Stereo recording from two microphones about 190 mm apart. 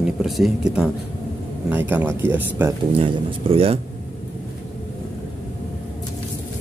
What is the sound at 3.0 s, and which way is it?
Speech, 30° right (ahead or behind).